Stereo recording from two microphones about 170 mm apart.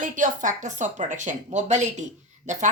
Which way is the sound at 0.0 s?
50° right (ahead or behind).